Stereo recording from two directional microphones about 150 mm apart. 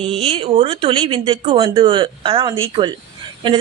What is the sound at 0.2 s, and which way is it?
Speech, 40° right (ahead or behind).